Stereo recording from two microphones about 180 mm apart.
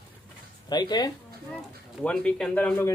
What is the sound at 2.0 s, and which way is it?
Speech, 5° left (ahead or behind).